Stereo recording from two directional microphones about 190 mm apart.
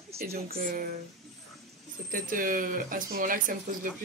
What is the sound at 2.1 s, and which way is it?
Speech, 45° right (ahead or behind).